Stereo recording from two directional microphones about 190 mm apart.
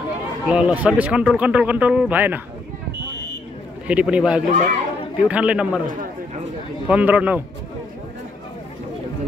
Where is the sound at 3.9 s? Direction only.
5° right (ahead or behind).